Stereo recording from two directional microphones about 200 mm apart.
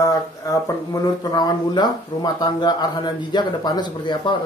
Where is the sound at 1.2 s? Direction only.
20° left (ahead or behind).